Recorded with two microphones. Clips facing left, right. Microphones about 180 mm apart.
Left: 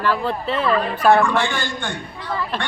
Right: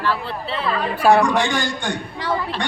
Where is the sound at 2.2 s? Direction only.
90° right.